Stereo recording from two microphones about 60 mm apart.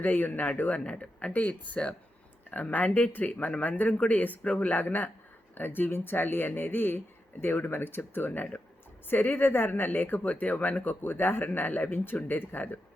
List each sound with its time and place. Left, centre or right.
0.0 s speech: left